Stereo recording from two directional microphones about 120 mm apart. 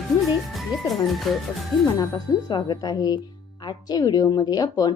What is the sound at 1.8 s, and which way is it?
Speech, 30° left (ahead or behind).